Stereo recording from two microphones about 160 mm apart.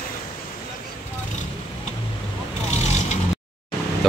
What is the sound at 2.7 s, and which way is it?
Vehicle, 45° left (ahead or behind).